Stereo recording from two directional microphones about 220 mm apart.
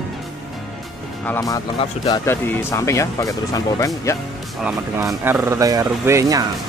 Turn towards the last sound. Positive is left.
turn(degrees=-15)  # may be behind; listen again after turning